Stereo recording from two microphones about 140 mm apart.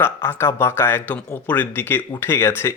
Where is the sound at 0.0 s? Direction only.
15° left (ahead or behind).